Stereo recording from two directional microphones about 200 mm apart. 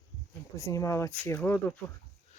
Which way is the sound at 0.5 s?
15° left (ahead or behind).